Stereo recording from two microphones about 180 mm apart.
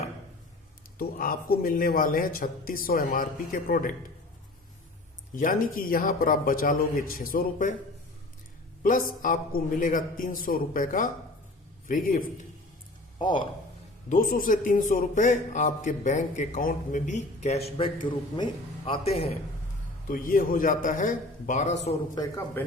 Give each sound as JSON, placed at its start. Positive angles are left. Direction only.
{"t": 0.9, "sound": "a man's voice", "side_deg": 55}
{"t": 5.4, "sound": "a man's voice", "side_deg": 50}
{"t": 8.8, "sound": "a man's voice", "side_deg": 50}
{"t": 13.1, "sound": "speech", "side_deg": 25}
{"t": 14.1, "sound": "a man's voice", "side_deg": 50}
{"t": 17.7, "sound": "a man's voice", "side_deg": 30}
{"t": 20.1, "sound": "a man's voice", "side_deg": 50}
{"t": 22.1, "sound": "a man's voice", "side_deg": 20}